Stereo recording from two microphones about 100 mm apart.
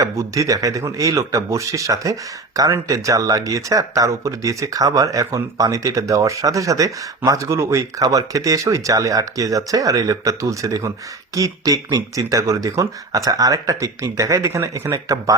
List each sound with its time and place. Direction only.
0.0 s speech: 35° right (ahead or behind)